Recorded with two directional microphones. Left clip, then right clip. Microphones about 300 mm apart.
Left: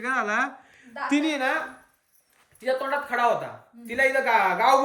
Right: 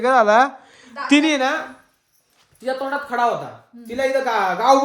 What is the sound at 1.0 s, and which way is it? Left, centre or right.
Speech, right.